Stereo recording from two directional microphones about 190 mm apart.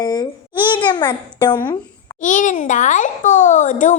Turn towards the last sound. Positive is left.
turn(degrees=40)  # may be behind; listen again after turning